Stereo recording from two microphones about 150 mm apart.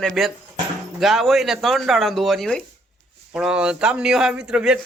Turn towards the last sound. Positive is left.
turn(degrees=-5)  # may be behind; listen again after turning